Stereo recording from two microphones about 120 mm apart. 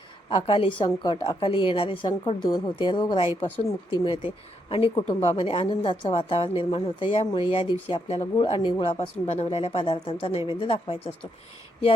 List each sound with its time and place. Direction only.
0.3 s a woman's voice: 45° left (ahead or behind)
9.2 s a woman's voice: 65° left (ahead or behind)